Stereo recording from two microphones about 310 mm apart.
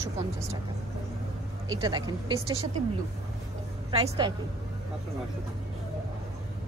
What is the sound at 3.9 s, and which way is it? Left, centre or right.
Speech, centre.